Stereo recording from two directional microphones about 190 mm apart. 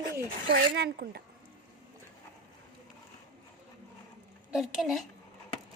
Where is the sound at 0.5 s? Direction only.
55° right (ahead or behind).